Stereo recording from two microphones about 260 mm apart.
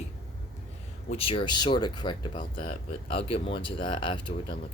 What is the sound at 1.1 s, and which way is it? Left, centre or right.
Speech, left.